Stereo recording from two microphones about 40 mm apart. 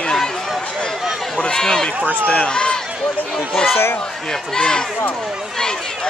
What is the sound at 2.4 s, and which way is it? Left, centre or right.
Speech, left.